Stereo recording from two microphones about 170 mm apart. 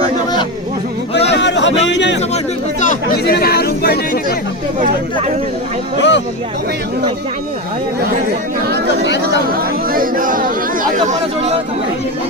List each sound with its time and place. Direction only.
1.3 s a sound: 90° left
2.8 s chatter: 50° left (ahead or behind)
3.3 s speech: 65° left (ahead or behind)
6.0 s speech: 90° left
8.6 s chatter: 65° right (ahead or behind)
9.6 s speech: 55° right (ahead or behind)